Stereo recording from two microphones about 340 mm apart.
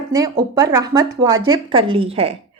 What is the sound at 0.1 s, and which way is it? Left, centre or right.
A woman's voice, centre.